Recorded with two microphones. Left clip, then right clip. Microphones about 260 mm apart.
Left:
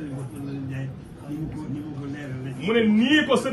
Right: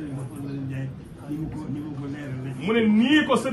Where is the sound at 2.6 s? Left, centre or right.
Right.